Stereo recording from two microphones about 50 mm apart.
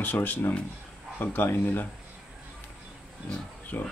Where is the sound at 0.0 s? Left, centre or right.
Left.